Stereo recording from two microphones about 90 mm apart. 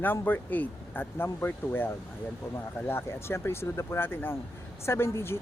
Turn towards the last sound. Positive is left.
turn(degrees=25)  # may be behind; listen again after turning